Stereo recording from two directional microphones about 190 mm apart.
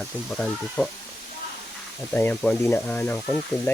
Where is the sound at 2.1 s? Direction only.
10° left (ahead or behind).